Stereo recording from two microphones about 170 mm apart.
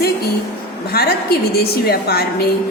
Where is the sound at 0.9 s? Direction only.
65° left (ahead or behind).